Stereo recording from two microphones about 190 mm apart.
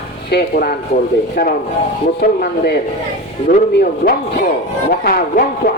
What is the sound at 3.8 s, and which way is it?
Speech, 50° left (ahead or behind).